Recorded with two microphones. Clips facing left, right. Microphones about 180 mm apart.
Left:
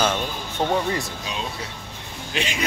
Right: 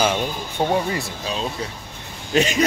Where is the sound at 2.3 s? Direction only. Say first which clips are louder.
Right 9 dB; 40° right (ahead or behind).